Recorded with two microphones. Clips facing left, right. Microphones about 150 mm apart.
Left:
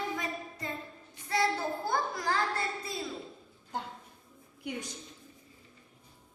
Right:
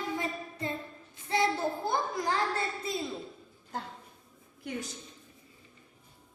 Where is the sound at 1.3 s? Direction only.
20° right (ahead or behind).